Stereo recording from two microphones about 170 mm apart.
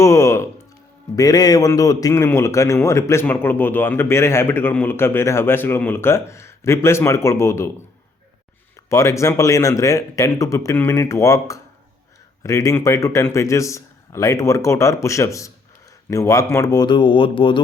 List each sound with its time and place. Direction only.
0.0 s a man's voice: 15° left (ahead or behind)
8.7 s a man's voice: 20° left (ahead or behind)